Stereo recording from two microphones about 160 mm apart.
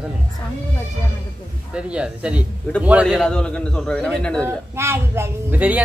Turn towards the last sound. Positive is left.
turn(degrees=-10)  # may be behind; listen again after turning